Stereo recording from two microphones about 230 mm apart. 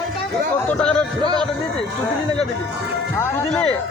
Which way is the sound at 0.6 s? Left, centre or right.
Centre.